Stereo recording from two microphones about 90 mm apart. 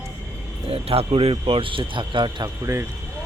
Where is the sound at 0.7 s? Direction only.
90° right; by 2.3 s 65° right (ahead or behind).